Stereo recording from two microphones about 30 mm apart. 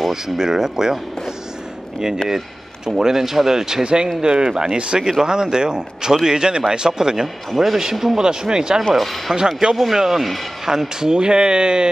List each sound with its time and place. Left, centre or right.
0.1 s speech: centre
2.2 s a man's voice: centre
3.8 s speech: right
7.5 s a man's voice: centre
8.2 s speech: right
8.9 s speech: centre
9.6 s speech: right
9.9 s a man's voice: centre; by 11.9 s right